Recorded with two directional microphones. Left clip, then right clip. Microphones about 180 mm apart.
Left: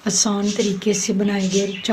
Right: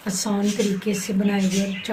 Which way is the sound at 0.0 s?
55° left (ahead or behind).